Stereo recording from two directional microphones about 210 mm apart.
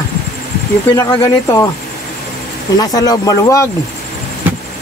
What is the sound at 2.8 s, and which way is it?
Speech, 20° left (ahead or behind).